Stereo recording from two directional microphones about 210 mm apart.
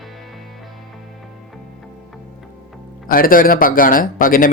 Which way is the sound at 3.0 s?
45° left (ahead or behind).